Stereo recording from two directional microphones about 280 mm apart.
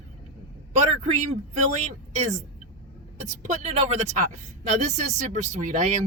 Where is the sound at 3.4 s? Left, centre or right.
Right.